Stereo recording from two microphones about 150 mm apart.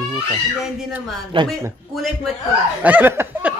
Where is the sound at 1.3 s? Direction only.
35° right (ahead or behind).